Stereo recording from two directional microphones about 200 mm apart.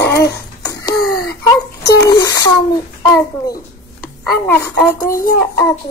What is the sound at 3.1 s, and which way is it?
Speech, 15° left (ahead or behind).